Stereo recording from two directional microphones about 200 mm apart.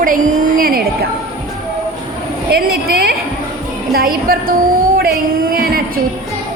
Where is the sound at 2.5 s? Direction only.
50° right (ahead or behind).